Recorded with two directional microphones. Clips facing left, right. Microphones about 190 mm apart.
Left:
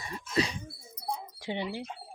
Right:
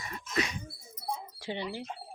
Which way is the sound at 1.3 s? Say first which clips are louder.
Left 2 dB; 20° left (ahead or behind).